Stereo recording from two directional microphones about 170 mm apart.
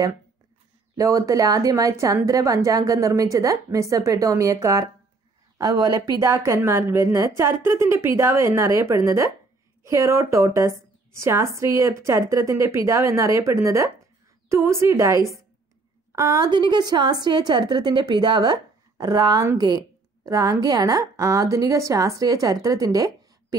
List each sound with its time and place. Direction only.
0.9 s a woman's voice: 20° right (ahead or behind)